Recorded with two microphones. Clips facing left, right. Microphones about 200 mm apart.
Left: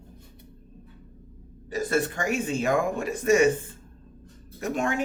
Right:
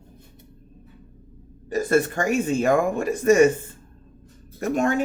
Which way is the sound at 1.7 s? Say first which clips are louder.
Right 5 dB; 50° right (ahead or behind).